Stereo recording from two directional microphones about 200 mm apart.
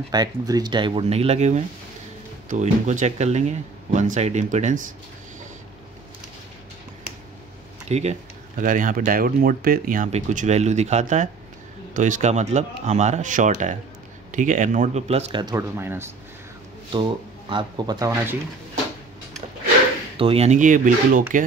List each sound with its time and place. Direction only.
0.1 s speech: 20° right (ahead or behind); by 4.8 s 35° right (ahead or behind)
7.9 s speech: 35° right (ahead or behind)
15.4 s speech: 15° right (ahead or behind)
16.9 s speech: 25° right (ahead or behind)
20.2 s speech: 30° right (ahead or behind)